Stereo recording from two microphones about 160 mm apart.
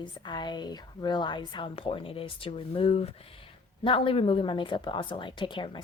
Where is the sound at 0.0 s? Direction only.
30° left (ahead or behind).